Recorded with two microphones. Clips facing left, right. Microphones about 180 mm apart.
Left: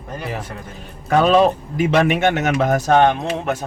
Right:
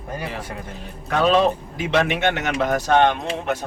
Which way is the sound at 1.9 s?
45° left (ahead or behind).